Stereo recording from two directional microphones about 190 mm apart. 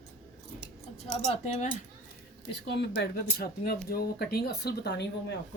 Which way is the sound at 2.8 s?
55° left (ahead or behind).